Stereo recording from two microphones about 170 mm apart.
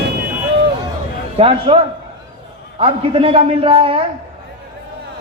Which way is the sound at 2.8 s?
35° right (ahead or behind).